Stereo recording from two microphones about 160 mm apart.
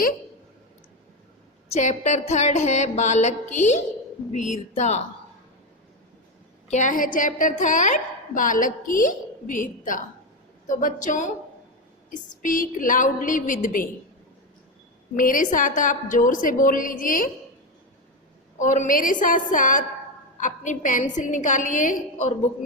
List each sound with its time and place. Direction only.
1.7 s a woman's voice: 50° left (ahead or behind)
6.7 s a woman's voice: 50° left (ahead or behind)
15.1 s a woman's voice: 55° left (ahead or behind)
18.6 s a woman's voice: 55° left (ahead or behind)